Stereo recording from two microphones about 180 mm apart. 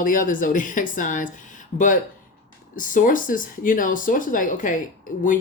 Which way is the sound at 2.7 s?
50° left (ahead or behind).